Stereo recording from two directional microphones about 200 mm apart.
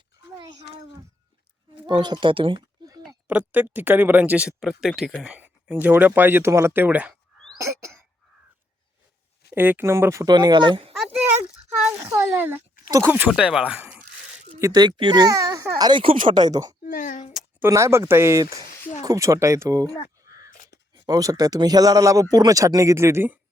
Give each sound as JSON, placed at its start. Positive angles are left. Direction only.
{"t": 0.3, "sound": "a sound", "side_deg": -20}
{"t": 1.9, "sound": "a woman's voice", "side_deg": -20}
{"t": 3.2, "sound": "speech", "side_deg": -10}
{"t": 9.6, "sound": "speech", "side_deg": -10}
{"t": 11.8, "sound": "a sound", "side_deg": -10}
{"t": 12.9, "sound": "speech", "side_deg": -10}
{"t": 14.6, "sound": "a child's voice", "side_deg": -20}
{"t": 16.1, "sound": "speech", "side_deg": -40}
{"t": 16.5, "sound": "a child's voice", "side_deg": -20}
{"t": 16.8, "sound": "a sound", "side_deg": 40}
{"t": 17.3, "sound": "speech", "side_deg": -10}